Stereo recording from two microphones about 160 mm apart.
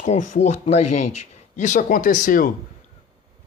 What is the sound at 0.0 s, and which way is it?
A man's voice, 45° left (ahead or behind).